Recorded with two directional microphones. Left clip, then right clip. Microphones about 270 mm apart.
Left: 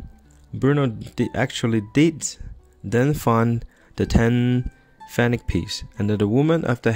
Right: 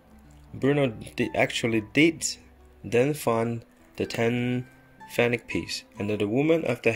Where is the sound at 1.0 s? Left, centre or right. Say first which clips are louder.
Left 1 dB; left.